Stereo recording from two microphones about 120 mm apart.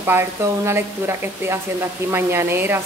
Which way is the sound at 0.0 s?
20° right (ahead or behind).